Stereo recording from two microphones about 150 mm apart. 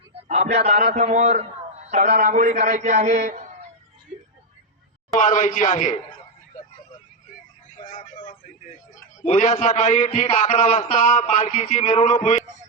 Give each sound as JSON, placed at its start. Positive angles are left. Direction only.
{"t": 0.3, "sound": "a man's voice", "side_deg": -45}
{"t": 5.1, "sound": "a man's voice", "side_deg": 60}
{"t": 7.9, "sound": "vehicle", "side_deg": 60}
{"t": 9.2, "sound": "a man's voice", "side_deg": 55}